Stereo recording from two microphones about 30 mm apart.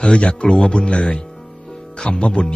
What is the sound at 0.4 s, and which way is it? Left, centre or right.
Speech, left.